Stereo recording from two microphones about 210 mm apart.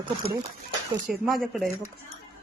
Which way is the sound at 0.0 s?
25° right (ahead or behind).